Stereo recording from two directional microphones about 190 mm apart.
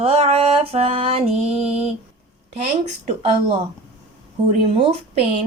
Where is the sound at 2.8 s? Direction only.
35° right (ahead or behind).